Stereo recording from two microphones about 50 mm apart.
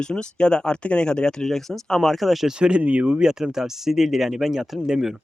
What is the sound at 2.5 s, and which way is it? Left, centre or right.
Speech, centre.